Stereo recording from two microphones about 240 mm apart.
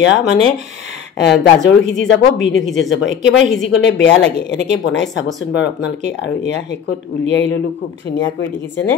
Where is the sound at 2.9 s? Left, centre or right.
Left.